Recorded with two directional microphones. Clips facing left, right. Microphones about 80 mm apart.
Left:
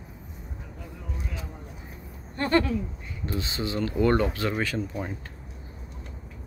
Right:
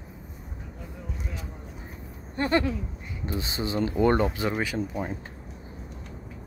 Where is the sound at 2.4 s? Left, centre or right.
Centre.